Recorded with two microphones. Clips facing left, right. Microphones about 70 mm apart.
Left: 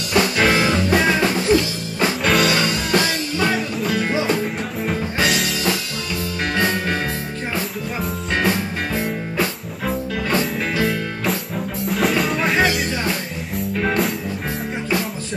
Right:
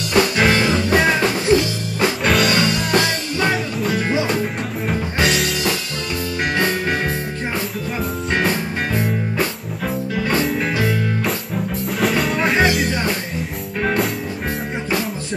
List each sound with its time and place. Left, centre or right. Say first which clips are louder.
0.1 s music: right 1 dB; centre
8.4 s music: left 1 dB; centre
12.0 s music: right 1 dB; centre